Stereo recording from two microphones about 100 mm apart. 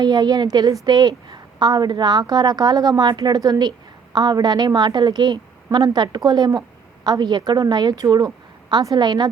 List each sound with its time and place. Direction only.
0.0 s a woman's voice: 45° right (ahead or behind)